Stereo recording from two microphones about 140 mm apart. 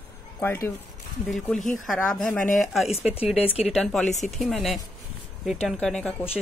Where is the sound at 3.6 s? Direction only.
Centre (ahead or behind).